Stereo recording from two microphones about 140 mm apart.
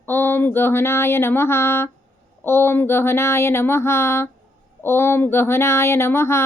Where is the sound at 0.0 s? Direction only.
15° left (ahead or behind).